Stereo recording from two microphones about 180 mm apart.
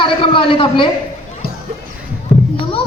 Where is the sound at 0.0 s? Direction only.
30° left (ahead or behind).